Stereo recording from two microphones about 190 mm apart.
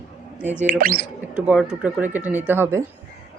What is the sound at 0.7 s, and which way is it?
Speech, 50° right (ahead or behind).